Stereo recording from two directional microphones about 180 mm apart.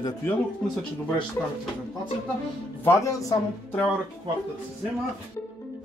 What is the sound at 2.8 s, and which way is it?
Speech, 15° left (ahead or behind).